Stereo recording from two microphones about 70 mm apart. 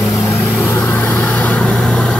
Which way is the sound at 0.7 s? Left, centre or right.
Left.